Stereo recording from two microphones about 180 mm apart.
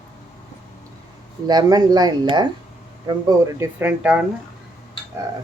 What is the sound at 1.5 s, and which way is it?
Speech, 20° right (ahead or behind).